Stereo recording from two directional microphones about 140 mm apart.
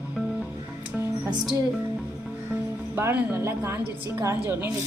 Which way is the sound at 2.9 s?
15° right (ahead or behind).